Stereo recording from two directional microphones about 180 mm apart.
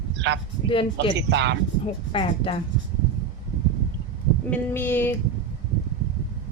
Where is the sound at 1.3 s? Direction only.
85° right.